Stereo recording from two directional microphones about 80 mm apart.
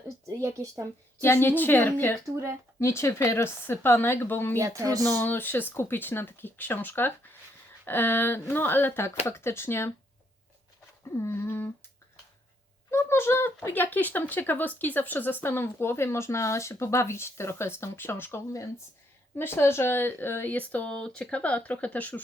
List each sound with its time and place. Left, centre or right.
0.3 s speech: right
1.2 s speech: left
2.3 s speech: right
2.8 s speech: left
4.5 s speech: right
5.0 s speech: left
11.2 s speech: left
12.9 s speech: left